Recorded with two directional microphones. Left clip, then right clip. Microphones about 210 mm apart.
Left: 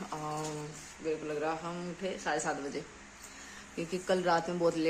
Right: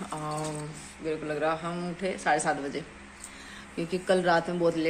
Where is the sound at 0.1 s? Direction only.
10° left (ahead or behind).